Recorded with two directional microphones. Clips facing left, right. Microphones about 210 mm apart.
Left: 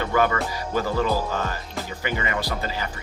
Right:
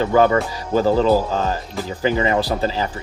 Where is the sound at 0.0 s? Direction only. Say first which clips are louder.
Right 7 dB; 30° right (ahead or behind).